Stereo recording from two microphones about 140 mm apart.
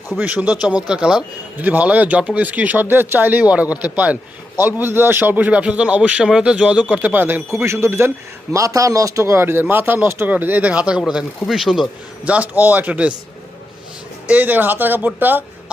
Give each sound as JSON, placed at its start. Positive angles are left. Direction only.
{"t": 0.2, "sound": "speech", "side_deg": -15}
{"t": 1.6, "sound": "speech", "side_deg": -10}
{"t": 14.3, "sound": "speech", "side_deg": -10}